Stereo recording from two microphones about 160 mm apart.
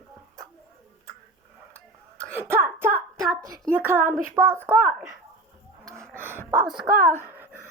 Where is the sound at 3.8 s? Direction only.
15° right (ahead or behind).